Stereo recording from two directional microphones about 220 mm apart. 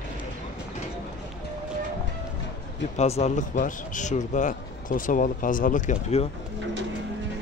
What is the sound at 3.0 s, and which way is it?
A man's voice, 30° left (ahead or behind).